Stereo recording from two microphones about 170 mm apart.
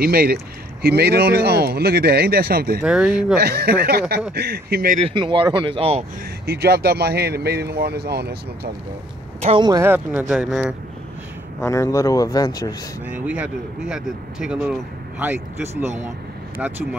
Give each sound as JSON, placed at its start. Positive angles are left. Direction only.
{"t": 0.0, "sound": "speech", "side_deg": -65}
{"t": 2.8, "sound": "speech", "side_deg": -5}
{"t": 3.3, "sound": "speech", "side_deg": -65}
{"t": 5.1, "sound": "speech", "side_deg": -30}
{"t": 6.4, "sound": "speech", "side_deg": -70}
{"t": 9.4, "sound": "speech", "side_deg": -35}
{"t": 9.7, "sound": "speech", "side_deg": -15}
{"t": 11.6, "sound": "speech", "side_deg": 15}
{"t": 13.1, "sound": "speech", "side_deg": -10}